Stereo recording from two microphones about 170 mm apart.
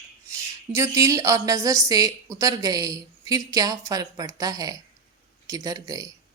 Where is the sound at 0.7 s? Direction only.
20° right (ahead or behind).